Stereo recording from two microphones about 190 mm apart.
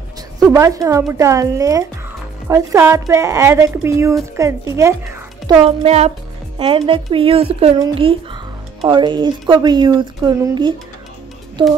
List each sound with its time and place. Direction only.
0.5 s a woman's voice: 15° right (ahead or behind)
5.9 s speech: 35° right (ahead or behind)